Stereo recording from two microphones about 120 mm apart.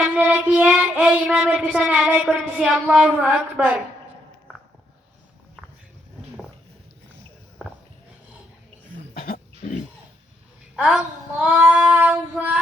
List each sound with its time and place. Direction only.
0.0 s child singing: 10° right (ahead or behind)
10.8 s child singing: 10° right (ahead or behind)